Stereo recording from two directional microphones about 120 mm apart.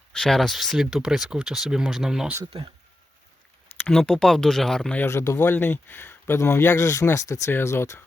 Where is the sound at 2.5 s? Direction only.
55° right (ahead or behind).